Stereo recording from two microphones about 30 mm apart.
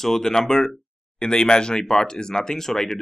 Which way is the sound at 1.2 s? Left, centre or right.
Left.